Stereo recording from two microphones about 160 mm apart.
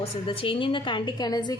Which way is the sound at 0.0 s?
35° left (ahead or behind).